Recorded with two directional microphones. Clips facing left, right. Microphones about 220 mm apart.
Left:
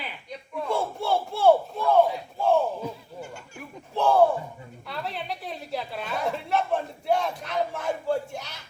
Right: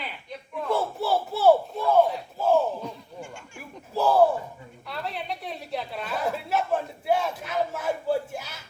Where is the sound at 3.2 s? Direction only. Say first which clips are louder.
Left 1 dB; 40° left (ahead or behind).